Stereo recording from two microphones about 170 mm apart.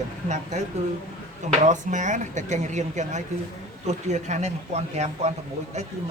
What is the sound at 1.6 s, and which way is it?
Speech, 45° right (ahead or behind).